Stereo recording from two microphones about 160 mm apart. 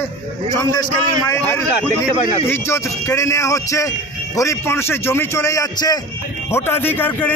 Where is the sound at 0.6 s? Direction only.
25° left (ahead or behind).